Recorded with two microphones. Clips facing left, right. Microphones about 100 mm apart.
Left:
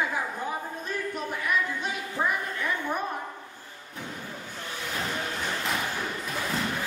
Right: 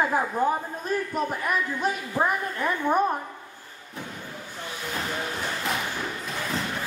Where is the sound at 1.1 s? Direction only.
45° right (ahead or behind).